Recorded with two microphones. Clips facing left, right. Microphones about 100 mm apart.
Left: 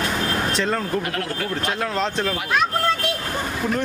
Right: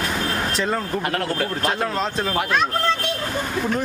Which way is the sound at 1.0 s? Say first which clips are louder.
Right 3 dB; 40° right (ahead or behind).